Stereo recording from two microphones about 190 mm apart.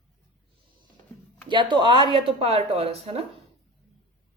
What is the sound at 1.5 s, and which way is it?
A woman's voice, 25° right (ahead or behind).